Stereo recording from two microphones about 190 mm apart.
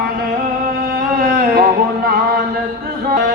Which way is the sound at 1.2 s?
50° right (ahead or behind).